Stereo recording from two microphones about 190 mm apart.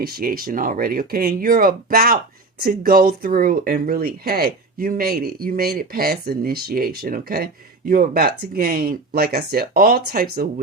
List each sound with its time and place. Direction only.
0.0 s speech: 50° right (ahead or behind)